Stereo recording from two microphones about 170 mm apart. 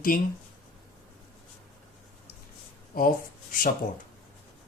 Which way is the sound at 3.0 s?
55° left (ahead or behind).